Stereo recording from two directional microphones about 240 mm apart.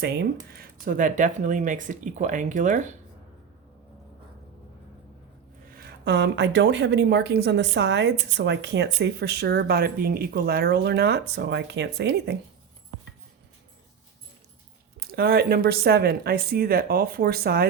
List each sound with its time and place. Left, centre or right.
0.0 s a woman's voice: right
5.7 s a woman's voice: right
14.9 s speech: right